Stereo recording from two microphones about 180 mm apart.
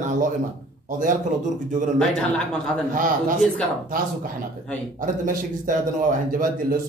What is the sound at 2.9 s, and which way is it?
Speech, 50° right (ahead or behind).